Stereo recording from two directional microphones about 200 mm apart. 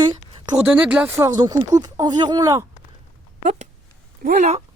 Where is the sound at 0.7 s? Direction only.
5° right (ahead or behind).